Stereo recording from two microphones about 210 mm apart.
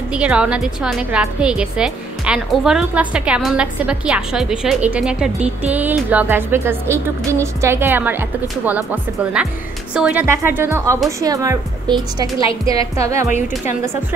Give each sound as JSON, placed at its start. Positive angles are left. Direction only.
{"t": 0.1, "sound": "a woman's voice", "side_deg": -5}
{"t": 12.6, "sound": "speech", "side_deg": -15}